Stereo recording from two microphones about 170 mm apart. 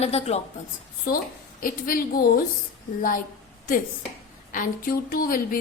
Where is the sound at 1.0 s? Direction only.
60° left (ahead or behind).